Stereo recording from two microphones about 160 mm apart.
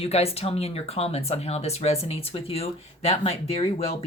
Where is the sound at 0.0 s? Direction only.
40° left (ahead or behind).